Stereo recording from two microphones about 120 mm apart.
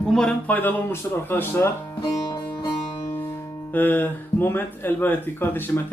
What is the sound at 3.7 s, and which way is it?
Speech, 15° left (ahead or behind).